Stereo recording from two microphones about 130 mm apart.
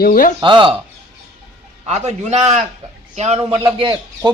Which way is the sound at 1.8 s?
60° right (ahead or behind).